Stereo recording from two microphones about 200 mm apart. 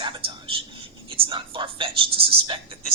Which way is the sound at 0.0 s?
25° right (ahead or behind).